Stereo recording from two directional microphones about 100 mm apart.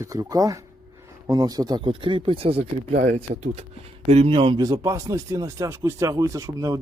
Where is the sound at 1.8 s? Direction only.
60° right (ahead or behind).